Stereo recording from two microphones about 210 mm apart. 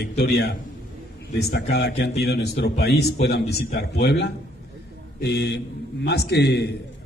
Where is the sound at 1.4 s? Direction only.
50° left (ahead or behind).